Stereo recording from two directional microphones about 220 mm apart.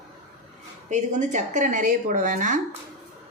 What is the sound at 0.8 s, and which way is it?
Speech, 30° right (ahead or behind).